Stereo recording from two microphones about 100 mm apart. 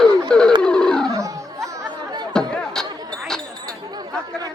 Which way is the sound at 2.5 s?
5° left (ahead or behind).